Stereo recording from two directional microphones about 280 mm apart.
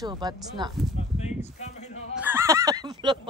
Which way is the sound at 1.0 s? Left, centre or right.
Left.